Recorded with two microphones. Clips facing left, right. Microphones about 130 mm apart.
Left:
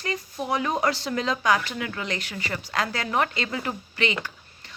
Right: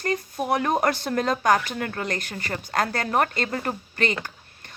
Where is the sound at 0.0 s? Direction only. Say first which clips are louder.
Right 4 dB; 50° right (ahead or behind).